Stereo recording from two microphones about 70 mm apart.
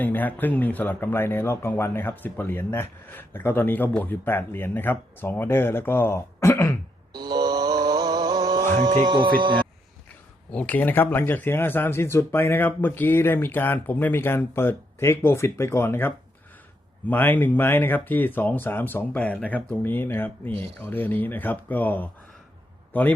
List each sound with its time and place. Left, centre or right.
0.0 s speech: left
7.1 s a sound: right
10.5 s a man's voice: left